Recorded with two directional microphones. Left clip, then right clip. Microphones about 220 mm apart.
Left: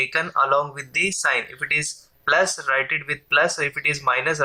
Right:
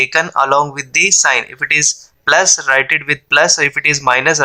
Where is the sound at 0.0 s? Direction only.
40° right (ahead or behind).